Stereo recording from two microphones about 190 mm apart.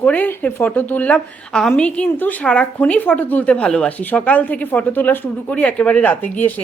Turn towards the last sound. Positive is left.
turn(degrees=10)  # may be behind; listen again after turning